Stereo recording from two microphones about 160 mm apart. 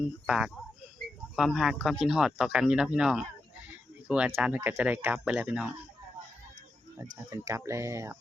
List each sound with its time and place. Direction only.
0.3 s speech: 5° right (ahead or behind)
4.4 s speech: 10° right (ahead or behind)
7.3 s speech: 20° right (ahead or behind)